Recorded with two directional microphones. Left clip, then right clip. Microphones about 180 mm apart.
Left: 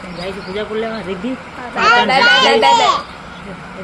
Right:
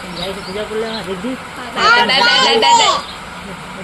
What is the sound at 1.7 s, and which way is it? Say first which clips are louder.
Speech: even; 10° left (ahead or behind).